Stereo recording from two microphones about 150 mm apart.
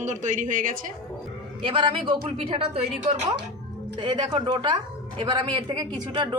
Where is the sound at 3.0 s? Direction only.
50° right (ahead or behind).